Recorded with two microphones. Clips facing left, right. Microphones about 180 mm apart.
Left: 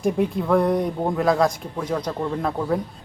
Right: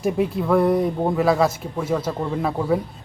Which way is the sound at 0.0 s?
5° right (ahead or behind).